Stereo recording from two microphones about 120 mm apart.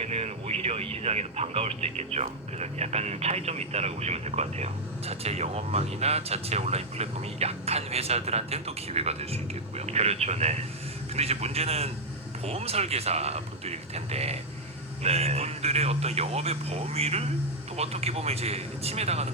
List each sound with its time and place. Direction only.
0.0 s speech: 60° right (ahead or behind)